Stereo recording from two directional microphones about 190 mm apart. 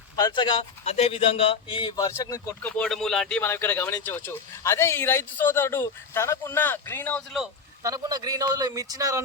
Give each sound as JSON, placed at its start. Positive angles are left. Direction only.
{"t": 0.2, "sound": "speech", "side_deg": 25}
{"t": 7.8, "sound": "a man's voice", "side_deg": -20}